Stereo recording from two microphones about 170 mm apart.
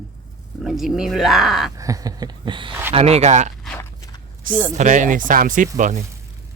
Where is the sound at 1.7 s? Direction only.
20° right (ahead or behind).